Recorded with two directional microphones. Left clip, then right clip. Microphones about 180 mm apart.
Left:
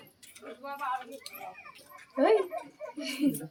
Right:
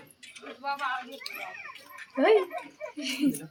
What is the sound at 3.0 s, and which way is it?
Speech, 35° right (ahead or behind).